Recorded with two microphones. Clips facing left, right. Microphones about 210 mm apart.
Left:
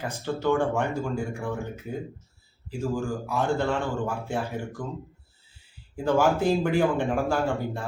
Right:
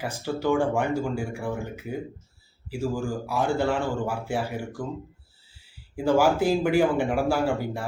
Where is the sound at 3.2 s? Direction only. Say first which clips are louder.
Right 2 dB; centre (ahead or behind).